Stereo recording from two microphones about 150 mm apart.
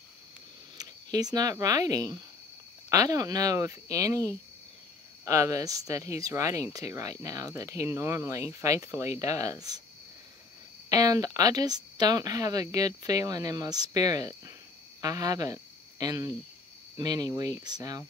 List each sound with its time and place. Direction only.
0.7 s speech: 25° right (ahead or behind)
10.9 s speech: 25° right (ahead or behind)